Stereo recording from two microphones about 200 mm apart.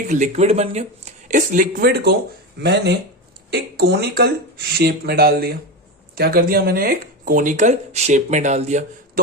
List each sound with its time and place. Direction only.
0.1 s speech: 35° right (ahead or behind)